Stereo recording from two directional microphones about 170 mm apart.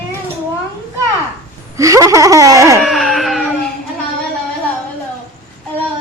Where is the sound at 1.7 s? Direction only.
20° right (ahead or behind).